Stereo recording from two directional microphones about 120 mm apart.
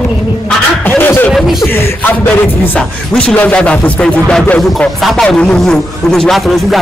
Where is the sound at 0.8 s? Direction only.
15° left (ahead or behind).